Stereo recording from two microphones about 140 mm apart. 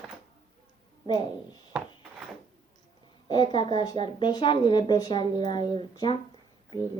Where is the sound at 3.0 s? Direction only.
30° left (ahead or behind).